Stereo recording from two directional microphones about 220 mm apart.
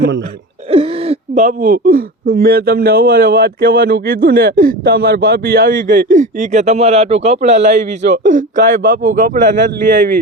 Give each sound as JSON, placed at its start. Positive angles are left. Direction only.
{"t": 0.7, "sound": "speech", "side_deg": -25}